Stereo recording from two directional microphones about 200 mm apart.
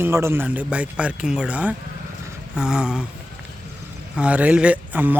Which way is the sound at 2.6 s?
5° right (ahead or behind).